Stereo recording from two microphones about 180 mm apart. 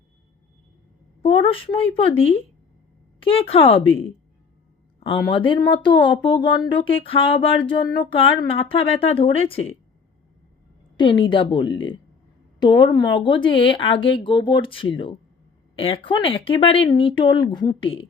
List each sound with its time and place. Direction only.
1.2 s speech: 30° left (ahead or behind)
4.9 s a sound: 30° left (ahead or behind)
5.2 s speech: 25° left (ahead or behind)
10.9 s speech: 25° left (ahead or behind)
11.7 s speech: 90° left
12.5 s speech: 25° left (ahead or behind)